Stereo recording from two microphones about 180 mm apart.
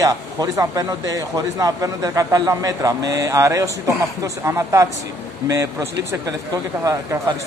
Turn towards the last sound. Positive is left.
turn(degrees=-20)  # may be behind; listen again after turning